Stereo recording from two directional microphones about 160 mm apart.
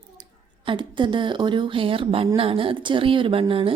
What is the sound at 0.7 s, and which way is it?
A woman's voice, 30° right (ahead or behind).